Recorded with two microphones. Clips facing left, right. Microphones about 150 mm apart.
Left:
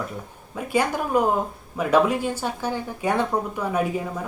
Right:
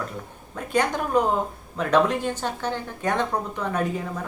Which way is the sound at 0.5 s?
10° left (ahead or behind).